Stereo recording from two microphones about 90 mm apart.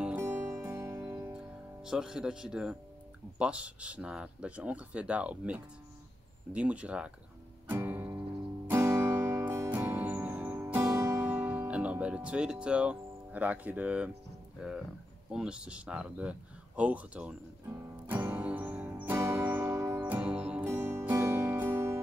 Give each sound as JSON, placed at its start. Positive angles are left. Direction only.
{"t": 0.2, "sound": "music", "side_deg": -30}
{"t": 1.9, "sound": "speech", "side_deg": -5}
{"t": 7.7, "sound": "music", "side_deg": -20}
{"t": 14.6, "sound": "speech", "side_deg": -10}
{"t": 17.6, "sound": "music", "side_deg": -20}
{"t": 20.6, "sound": "music", "side_deg": -25}